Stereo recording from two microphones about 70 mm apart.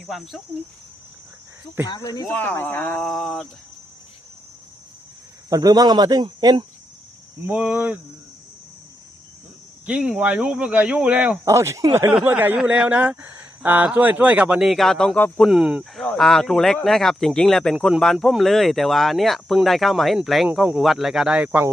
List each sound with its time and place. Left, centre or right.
0.1 s speech: centre
1.9 s speech: left
2.3 s speech: left
3.0 s speech: centre
5.5 s speech: right
7.5 s speech: centre
9.8 s speech: centre
11.4 s speech: right
12.2 s speech: right
12.6 s speech: centre
14.6 s speech: centre
15.4 s speech: centre
16.1 s speech: centre
21.3 s speech: centre